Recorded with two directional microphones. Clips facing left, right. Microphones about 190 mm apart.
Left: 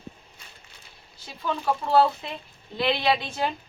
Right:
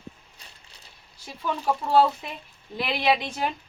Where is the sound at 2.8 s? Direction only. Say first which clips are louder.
Even; 15° right (ahead or behind).